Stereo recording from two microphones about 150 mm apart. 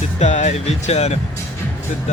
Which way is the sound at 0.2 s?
55° left (ahead or behind).